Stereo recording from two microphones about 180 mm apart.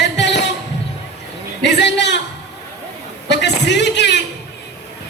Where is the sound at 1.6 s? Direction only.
75° left (ahead or behind).